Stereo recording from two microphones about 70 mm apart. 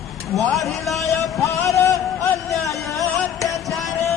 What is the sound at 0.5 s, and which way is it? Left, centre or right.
Speech, centre.